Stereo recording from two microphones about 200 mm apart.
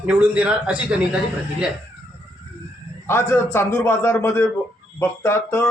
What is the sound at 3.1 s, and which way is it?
Speech, 10° left (ahead or behind).